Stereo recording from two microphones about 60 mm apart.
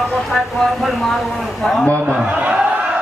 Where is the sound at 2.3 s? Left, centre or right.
Centre.